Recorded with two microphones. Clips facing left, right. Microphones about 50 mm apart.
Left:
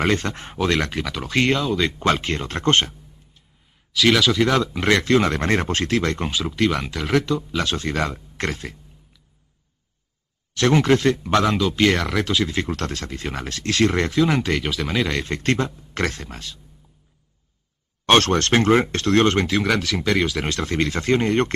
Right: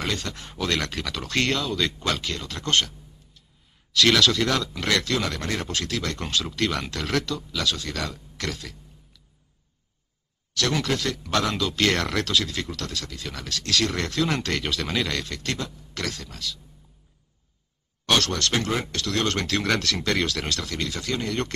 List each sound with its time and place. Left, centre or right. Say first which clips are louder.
0.0 s speech: left 8 dB; left
3.9 s speech: left 2 dB; centre; by 6.2 s left
6.2 s speech: left 5 dB; centre; by 8.7 s left
10.5 s speech: left 8 dB; left; by 12.3 s centre
12.3 s speech: left 4 dB; left
12.6 s speech: left 6 dB; left
14.1 s speech: left 6 dB; centre
15.1 s speech: left 8 dB; left
18.0 s speech: left 7 dB; left; by 20.4 s centre
20.4 s speech: left 6 dB; left